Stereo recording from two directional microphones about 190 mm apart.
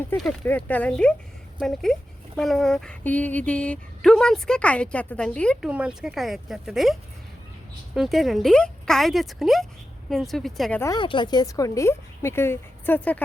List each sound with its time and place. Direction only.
0.1 s a woman's voice: 5° left (ahead or behind)
5.6 s speech: 5° right (ahead or behind)
7.9 s speech: centre (ahead or behind)
10.8 s a woman's voice: 20° left (ahead or behind)